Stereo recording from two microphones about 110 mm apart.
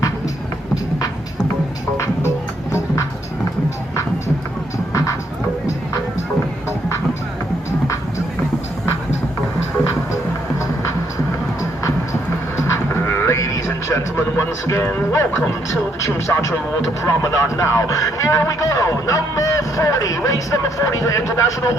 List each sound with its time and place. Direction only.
13.1 s music: 25° left (ahead or behind)
17.2 s speech: 30° left (ahead or behind)